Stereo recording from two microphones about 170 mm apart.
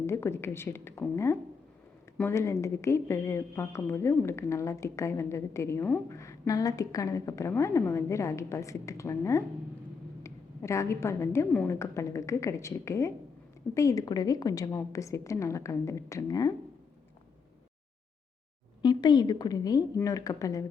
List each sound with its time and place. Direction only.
0.0 s a woman's voice: 15° left (ahead or behind)
18.8 s a woman's voice: 25° left (ahead or behind)